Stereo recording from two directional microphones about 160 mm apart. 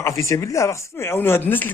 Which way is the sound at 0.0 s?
20° left (ahead or behind).